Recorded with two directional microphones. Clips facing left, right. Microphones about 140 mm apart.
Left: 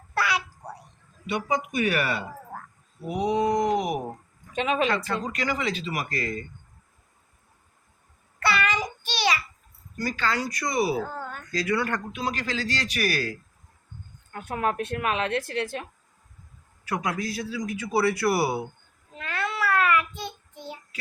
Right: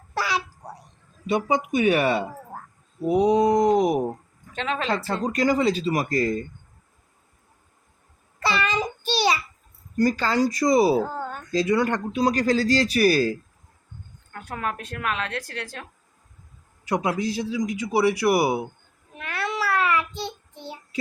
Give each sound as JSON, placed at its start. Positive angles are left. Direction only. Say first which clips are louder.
{"t": 1.3, "sound": "speech", "louder": "right 5 dB", "side_deg": -30}
{"t": 4.5, "sound": "speech", "louder": "left 3 dB", "side_deg": 15}
{"t": 5.0, "sound": "speech", "louder": "right 6 dB", "side_deg": -35}
{"t": 8.4, "sound": "a sound", "louder": "right 1 dB", "side_deg": -25}
{"t": 10.0, "sound": "speech", "louder": "right 7 dB", "side_deg": -40}
{"t": 12.1, "sound": "speech", "louder": "right 9 dB", "side_deg": -40}
{"t": 14.3, "sound": "a woman's voice", "louder": "left 3 dB", "side_deg": 20}
{"t": 16.9, "sound": "speech", "louder": "right 5 dB", "side_deg": -30}
{"t": 19.1, "sound": "meow", "louder": "right 2 dB", "side_deg": -15}